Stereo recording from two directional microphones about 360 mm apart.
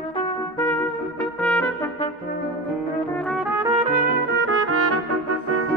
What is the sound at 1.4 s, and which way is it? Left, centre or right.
Brass instrument, centre.